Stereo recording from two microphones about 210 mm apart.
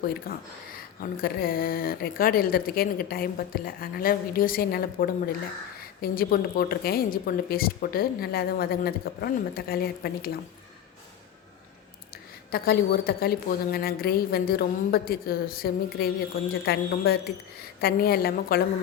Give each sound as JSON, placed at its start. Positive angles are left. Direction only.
{"t": 0.3, "sound": "a woman's voice", "side_deg": 45}
{"t": 12.5, "sound": "a woman's voice", "side_deg": 45}